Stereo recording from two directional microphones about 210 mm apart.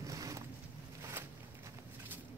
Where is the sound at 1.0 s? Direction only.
10° right (ahead or behind).